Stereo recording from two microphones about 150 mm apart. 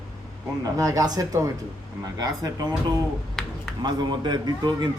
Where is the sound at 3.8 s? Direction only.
30° right (ahead or behind).